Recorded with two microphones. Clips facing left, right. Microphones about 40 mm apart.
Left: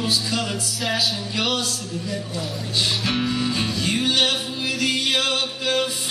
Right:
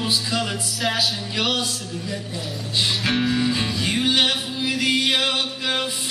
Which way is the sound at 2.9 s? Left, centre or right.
Centre.